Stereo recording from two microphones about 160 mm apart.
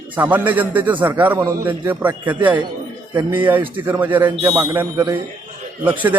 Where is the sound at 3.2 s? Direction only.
30° right (ahead or behind).